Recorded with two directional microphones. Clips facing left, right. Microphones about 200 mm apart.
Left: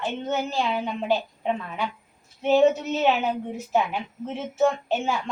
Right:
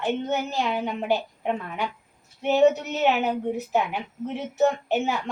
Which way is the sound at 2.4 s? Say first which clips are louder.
Even; 20° right (ahead or behind).